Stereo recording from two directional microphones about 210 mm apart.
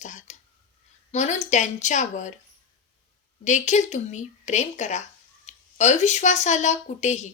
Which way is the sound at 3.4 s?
35° left (ahead or behind).